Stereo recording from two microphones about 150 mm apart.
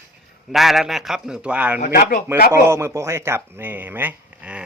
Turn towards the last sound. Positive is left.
turn(degrees=-10)  # may be behind; listen again after turning